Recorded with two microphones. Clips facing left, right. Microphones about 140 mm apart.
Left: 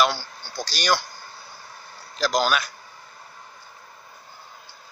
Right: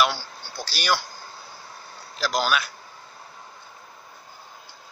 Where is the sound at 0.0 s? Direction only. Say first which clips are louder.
Left 1 dB; 10° right (ahead or behind).